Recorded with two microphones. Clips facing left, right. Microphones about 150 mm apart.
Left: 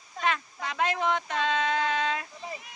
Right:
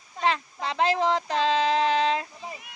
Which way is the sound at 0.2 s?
30° right (ahead or behind).